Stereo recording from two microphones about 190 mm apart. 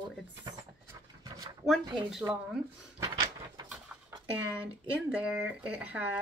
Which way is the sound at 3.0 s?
20° right (ahead or behind).